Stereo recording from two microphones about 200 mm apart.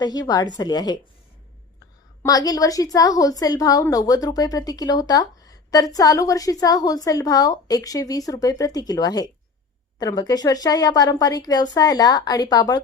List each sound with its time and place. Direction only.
0.0 s a woman's voice: 20° left (ahead or behind)
2.2 s a woman's voice: 20° left (ahead or behind)